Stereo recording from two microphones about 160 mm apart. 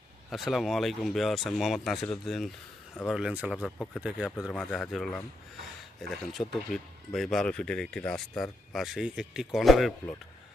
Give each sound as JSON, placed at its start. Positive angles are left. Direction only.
{"t": 0.3, "sound": "speech", "side_deg": 0}